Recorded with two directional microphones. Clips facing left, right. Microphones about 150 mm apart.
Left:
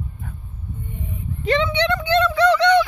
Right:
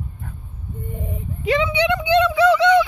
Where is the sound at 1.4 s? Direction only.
10° right (ahead or behind).